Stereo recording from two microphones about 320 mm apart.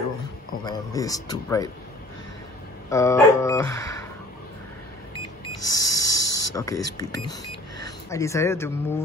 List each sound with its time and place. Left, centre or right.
0.7 s dog: centre
2.9 s dog: centre
5.7 s snake: left
6.5 s dog: centre